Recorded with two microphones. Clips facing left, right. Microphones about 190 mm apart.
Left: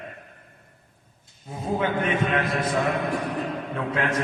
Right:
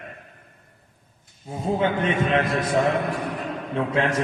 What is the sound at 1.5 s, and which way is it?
A man's voice, 30° right (ahead or behind).